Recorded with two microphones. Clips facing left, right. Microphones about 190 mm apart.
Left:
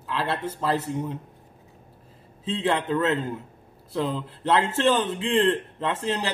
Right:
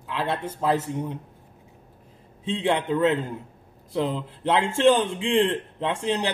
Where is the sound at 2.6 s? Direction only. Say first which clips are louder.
Right 2 dB; 10° right (ahead or behind).